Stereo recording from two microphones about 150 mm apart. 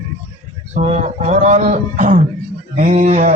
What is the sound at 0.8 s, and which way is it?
A man's voice, 50° right (ahead or behind).